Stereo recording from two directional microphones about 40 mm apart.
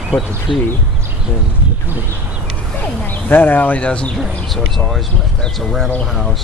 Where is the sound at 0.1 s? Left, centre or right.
Left.